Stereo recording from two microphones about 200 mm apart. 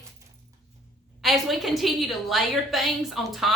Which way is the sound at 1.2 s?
Centre (ahead or behind).